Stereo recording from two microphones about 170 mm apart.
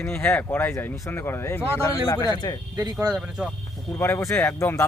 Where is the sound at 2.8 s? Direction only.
20° right (ahead or behind).